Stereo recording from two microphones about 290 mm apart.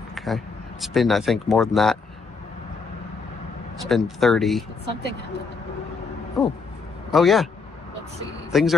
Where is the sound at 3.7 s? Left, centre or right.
Centre.